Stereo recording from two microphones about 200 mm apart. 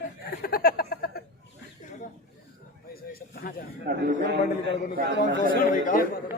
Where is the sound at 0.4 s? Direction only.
50° left (ahead or behind).